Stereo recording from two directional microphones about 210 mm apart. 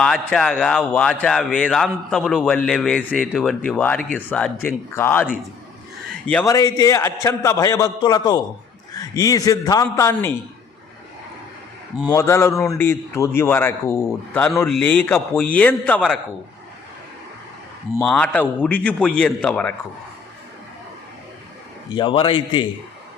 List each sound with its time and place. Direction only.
0.0 s a man's voice: 5° left (ahead or behind)
6.4 s a man's voice: 15° left (ahead or behind)
11.9 s a man's voice: 15° left (ahead or behind)
17.9 s speech: 5° left (ahead or behind)
21.9 s a man's voice: 20° left (ahead or behind)